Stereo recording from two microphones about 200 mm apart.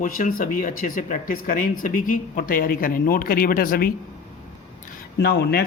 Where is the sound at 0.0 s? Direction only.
45° left (ahead or behind).